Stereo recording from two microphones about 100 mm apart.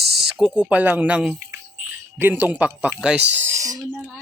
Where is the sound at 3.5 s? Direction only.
35° right (ahead or behind).